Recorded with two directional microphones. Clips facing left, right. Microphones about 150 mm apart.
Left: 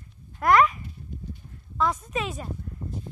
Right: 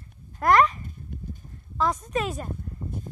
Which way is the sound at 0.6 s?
45° right (ahead or behind).